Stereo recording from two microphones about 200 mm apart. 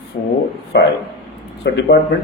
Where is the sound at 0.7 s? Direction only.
60° left (ahead or behind).